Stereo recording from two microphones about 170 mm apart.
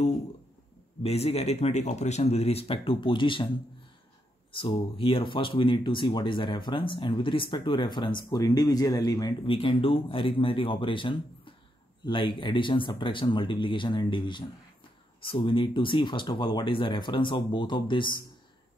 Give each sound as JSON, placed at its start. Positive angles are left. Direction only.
{"t": 1.0, "sound": "speech", "side_deg": 35}
{"t": 4.5, "sound": "speech", "side_deg": 30}